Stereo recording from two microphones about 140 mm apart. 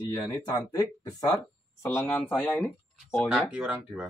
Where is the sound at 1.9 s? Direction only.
15° left (ahead or behind).